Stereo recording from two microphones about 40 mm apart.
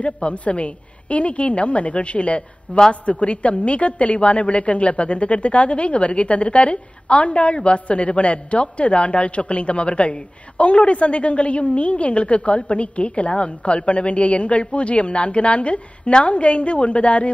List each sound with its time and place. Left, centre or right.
0.0 s a woman's voice: left